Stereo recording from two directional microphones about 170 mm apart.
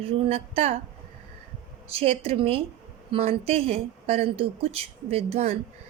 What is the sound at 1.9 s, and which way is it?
A woman's voice, 35° right (ahead or behind).